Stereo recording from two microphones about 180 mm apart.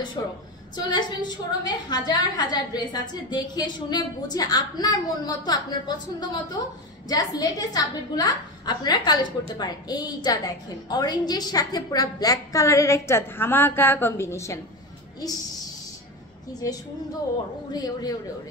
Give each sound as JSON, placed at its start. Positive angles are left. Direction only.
{"t": 0.2, "sound": "a woman's voice", "side_deg": 25}
{"t": 16.6, "sound": "a woman's voice", "side_deg": 15}